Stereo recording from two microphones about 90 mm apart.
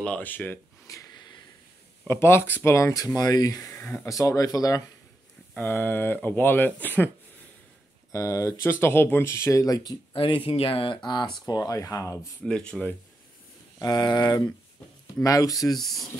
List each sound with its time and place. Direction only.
0.0 s speech: 15° left (ahead or behind)
0.9 s a sound: 35° left (ahead or behind)
2.0 s speech: 25° left (ahead or behind); by 3.7 s 40° left (ahead or behind)
3.7 s speech: 25° left (ahead or behind)
4.1 s speech: 40° left (ahead or behind)
5.6 s speech: 20° left (ahead or behind)
8.1 s speech: 35° left (ahead or behind)
10.1 s speech: 80° left; by 12.2 s 35° left (ahead or behind)
12.4 s speech: 10° left (ahead or behind)
13.7 s speech: 50° left (ahead or behind)
15.8 s speech: centre (ahead or behind)